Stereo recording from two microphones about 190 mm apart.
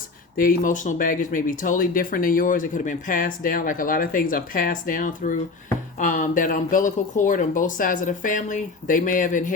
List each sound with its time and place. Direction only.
0.3 s speech: 45° left (ahead or behind)